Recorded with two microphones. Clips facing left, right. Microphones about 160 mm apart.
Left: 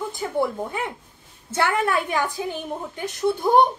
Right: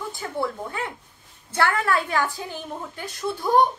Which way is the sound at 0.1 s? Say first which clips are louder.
Left 4 dB; 20° left (ahead or behind).